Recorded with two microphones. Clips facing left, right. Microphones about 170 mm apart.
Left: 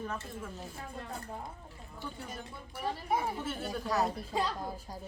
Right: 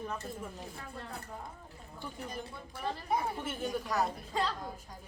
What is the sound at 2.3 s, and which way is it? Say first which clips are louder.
A woman's voice: right 1 dB; 5° left (ahead or behind).